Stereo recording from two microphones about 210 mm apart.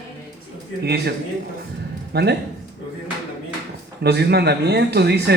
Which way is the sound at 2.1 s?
50° right (ahead or behind).